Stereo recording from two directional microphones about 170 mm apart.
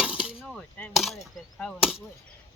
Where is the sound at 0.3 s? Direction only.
5° left (ahead or behind).